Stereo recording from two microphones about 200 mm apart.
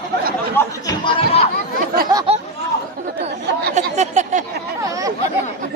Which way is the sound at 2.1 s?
25° right (ahead or behind).